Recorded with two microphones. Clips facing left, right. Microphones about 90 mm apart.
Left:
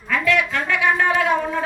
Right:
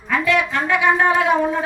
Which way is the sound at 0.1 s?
15° right (ahead or behind).